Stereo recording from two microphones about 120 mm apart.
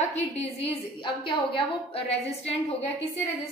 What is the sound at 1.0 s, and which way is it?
A woman's voice, 45° left (ahead or behind).